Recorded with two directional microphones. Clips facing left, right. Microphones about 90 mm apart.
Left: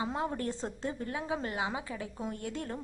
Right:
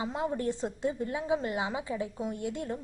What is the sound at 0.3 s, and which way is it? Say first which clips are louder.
A woman's voice: right 4 dB; 20° right (ahead or behind).